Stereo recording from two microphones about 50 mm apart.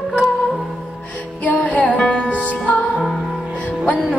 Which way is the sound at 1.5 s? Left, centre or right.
Left.